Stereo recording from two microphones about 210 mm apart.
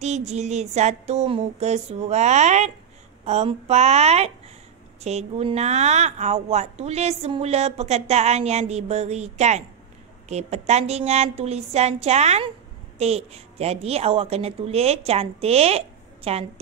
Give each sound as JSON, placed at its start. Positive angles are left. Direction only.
{"t": 0.0, "sound": "a woman's voice", "side_deg": -30}